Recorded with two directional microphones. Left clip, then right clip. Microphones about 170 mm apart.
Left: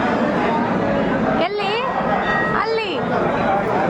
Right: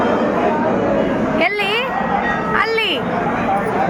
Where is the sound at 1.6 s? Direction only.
Centre (ahead or behind).